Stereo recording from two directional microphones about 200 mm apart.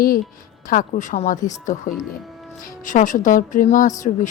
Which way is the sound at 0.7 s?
40° left (ahead or behind).